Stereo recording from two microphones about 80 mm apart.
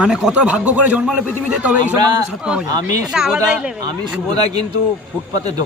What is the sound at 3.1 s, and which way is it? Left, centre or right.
Speech, centre.